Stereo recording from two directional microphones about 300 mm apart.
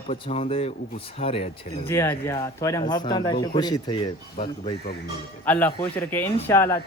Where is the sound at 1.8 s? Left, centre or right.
Centre.